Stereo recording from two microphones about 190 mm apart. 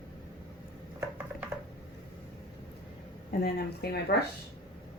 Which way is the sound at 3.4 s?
60° left (ahead or behind).